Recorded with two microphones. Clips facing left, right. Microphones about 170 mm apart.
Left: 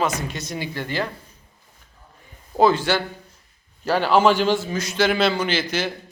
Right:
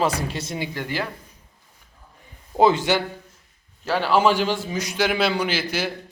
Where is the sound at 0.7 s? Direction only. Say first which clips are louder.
Left 4 dB; 10° right (ahead or behind).